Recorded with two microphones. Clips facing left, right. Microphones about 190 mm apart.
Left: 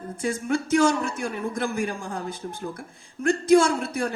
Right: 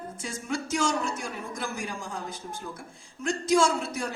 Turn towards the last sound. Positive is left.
turn(degrees=60)  # may be behind; listen again after turning